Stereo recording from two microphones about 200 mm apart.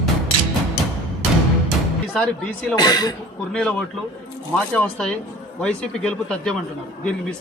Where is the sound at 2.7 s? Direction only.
20° left (ahead or behind).